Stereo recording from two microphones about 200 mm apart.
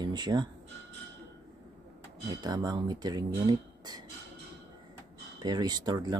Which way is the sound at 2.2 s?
20° right (ahead or behind).